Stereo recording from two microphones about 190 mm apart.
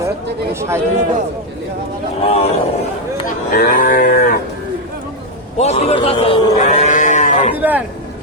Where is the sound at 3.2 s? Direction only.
50° left (ahead or behind).